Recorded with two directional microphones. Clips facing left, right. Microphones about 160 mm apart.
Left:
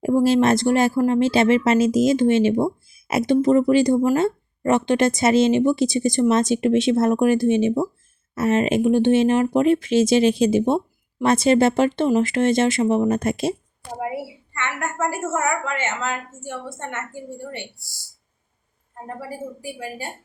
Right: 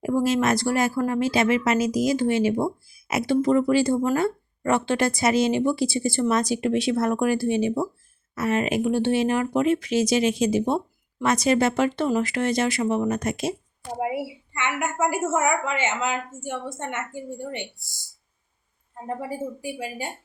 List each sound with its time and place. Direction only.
0.0 s speech: 30° left (ahead or behind)
14.0 s a woman's voice: 15° right (ahead or behind)